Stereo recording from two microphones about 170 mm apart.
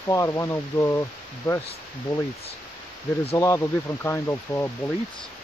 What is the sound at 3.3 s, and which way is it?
Speech, 20° left (ahead or behind).